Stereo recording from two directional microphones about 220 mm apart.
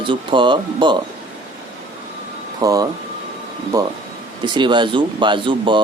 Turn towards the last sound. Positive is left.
turn(degrees=-20)  # may be behind; listen again after turning